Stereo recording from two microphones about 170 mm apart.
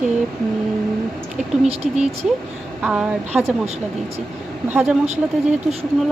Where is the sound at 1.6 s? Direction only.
35° right (ahead or behind).